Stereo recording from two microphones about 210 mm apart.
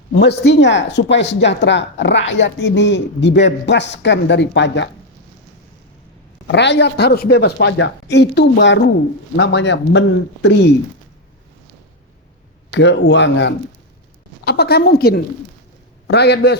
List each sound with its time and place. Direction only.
0.2 s speech: 55° left (ahead or behind)
6.5 s a woman's voice: 55° left (ahead or behind)
12.7 s a woman's voice: 60° left (ahead or behind)